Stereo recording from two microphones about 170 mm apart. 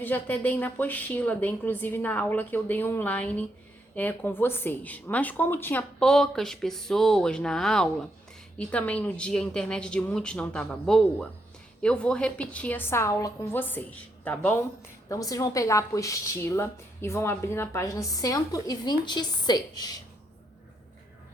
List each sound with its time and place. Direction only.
0.0 s a woman's voice: 10° left (ahead or behind)